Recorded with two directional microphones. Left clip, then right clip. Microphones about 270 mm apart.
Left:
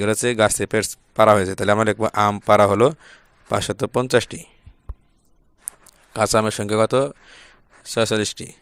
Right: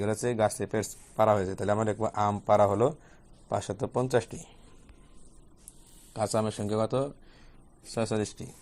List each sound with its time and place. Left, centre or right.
0.0 s speech: left
6.1 s speech: left